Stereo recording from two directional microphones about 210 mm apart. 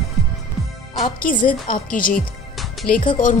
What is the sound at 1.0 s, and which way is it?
A woman's voice, 40° left (ahead or behind).